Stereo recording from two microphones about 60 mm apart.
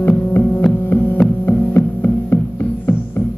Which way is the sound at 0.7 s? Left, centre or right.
Left.